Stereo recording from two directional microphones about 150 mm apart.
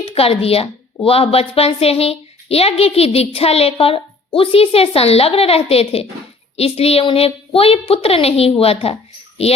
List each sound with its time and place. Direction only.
0.0 s a woman's voice: 40° left (ahead or behind)